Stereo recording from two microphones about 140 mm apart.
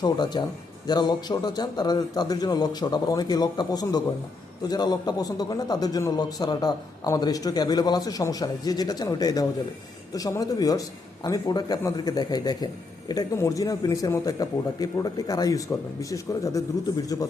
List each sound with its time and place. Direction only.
0.0 s a man's voice: 30° left (ahead or behind)